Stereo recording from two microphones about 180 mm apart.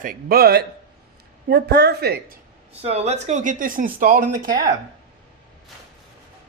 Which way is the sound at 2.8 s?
35° right (ahead or behind).